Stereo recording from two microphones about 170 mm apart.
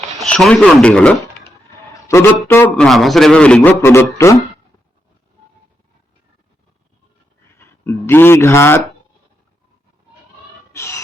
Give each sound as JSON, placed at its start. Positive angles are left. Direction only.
{"t": 0.2, "sound": "a man's voice", "side_deg": 5}
{"t": 7.6, "sound": "speech", "side_deg": 15}
{"t": 10.7, "sound": "a sound", "side_deg": 15}